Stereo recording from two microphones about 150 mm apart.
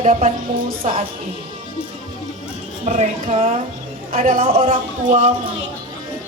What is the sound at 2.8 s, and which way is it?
Speech, 50° right (ahead or behind).